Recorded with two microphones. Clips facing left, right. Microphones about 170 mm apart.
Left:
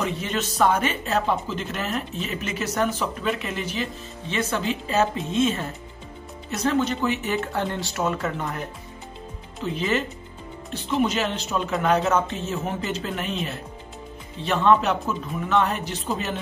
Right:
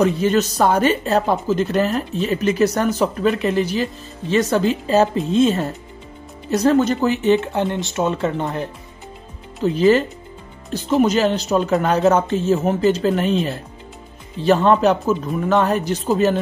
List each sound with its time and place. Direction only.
0.0 s speech: 40° right (ahead or behind)
7.2 s speech: 20° right (ahead or behind)
14.4 s speech: 40° right (ahead or behind)